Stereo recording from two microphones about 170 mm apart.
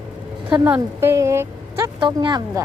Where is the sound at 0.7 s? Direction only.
15° right (ahead or behind).